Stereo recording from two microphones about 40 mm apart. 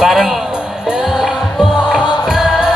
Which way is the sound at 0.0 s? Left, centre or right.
Centre.